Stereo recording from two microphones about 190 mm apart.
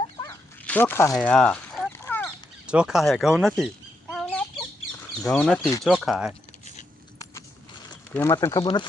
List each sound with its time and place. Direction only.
0.2 s dog: 10° left (ahead or behind)
1.1 s speech: 5° left (ahead or behind)
1.9 s a sound: 10° left (ahead or behind)
2.6 s speech: 5° right (ahead or behind)
4.1 s chicken: 5° left (ahead or behind)
5.3 s speech: 5° left (ahead or behind)
8.1 s speech: 15° left (ahead or behind)